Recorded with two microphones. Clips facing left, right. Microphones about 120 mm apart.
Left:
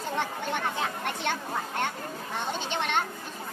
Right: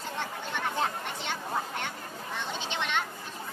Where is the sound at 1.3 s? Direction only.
55° left (ahead or behind).